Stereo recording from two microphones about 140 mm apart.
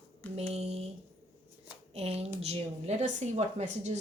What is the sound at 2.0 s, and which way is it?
Speech, 45° right (ahead or behind).